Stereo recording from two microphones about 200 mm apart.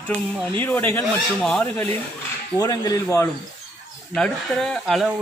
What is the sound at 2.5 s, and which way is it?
Speech, 20° left (ahead or behind).